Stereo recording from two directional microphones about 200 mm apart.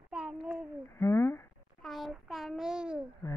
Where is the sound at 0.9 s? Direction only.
15° left (ahead or behind).